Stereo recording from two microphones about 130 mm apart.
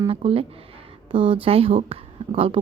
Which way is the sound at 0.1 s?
45° right (ahead or behind).